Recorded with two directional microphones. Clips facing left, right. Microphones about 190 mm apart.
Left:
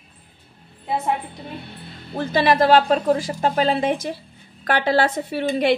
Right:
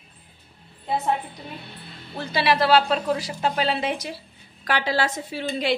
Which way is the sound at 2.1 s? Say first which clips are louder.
Left 4 dB; 50° left (ahead or behind).